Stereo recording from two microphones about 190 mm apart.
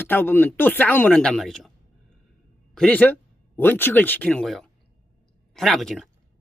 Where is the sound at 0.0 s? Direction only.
10° left (ahead or behind).